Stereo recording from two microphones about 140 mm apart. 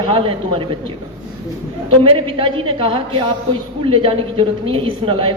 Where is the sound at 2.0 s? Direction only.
40° right (ahead or behind).